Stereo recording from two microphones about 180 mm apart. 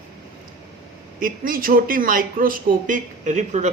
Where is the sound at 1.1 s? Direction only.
50° right (ahead or behind).